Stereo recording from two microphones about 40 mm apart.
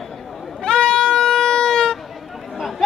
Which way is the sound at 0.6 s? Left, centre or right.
Centre.